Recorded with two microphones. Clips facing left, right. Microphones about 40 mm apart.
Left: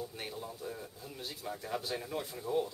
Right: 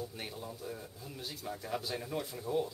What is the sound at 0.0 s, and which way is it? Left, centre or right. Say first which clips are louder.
Speech: left 1 dB; centre.